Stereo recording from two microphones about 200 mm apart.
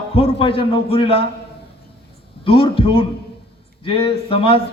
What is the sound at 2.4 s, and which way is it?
Speech, 25° left (ahead or behind).